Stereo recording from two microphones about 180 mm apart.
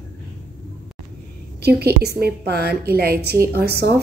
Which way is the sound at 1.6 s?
60° right (ahead or behind).